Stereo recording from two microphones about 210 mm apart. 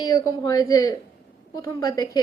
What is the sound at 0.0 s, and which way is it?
Speech, 15° left (ahead or behind).